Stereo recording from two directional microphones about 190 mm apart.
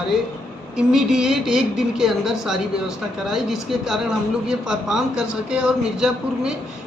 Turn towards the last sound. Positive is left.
turn(degrees=-5)  # may be behind; listen again after turning